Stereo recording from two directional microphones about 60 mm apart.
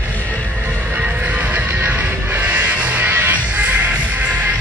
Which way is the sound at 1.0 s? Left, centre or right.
Right.